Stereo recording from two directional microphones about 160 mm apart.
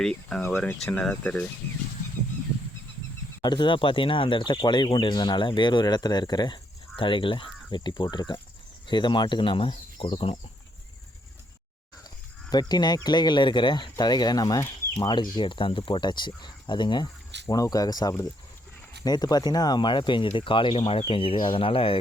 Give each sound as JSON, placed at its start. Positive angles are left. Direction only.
{"t": 0.0, "sound": "speech", "side_deg": 5}
{"t": 3.4, "sound": "speech", "side_deg": 30}
{"t": 12.5, "sound": "speech", "side_deg": 25}